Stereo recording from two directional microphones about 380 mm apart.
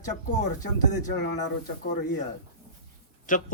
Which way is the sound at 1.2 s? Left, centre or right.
Left.